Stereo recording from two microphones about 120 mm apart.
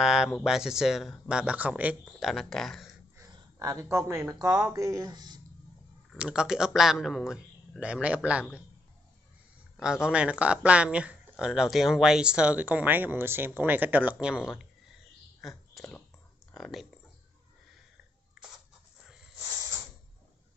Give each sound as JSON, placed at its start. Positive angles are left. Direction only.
{"t": 0.0, "sound": "speech", "side_deg": -5}
{"t": 2.1, "sound": "speech", "side_deg": 0}
{"t": 3.2, "sound": "speech", "side_deg": -30}
{"t": 6.1, "sound": "speech", "side_deg": -10}
{"t": 9.8, "sound": "speech", "side_deg": -5}
{"t": 15.4, "sound": "a sound", "side_deg": 0}
{"t": 16.5, "sound": "speech", "side_deg": 5}